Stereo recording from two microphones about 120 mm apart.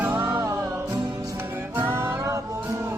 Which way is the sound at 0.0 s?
20° right (ahead or behind).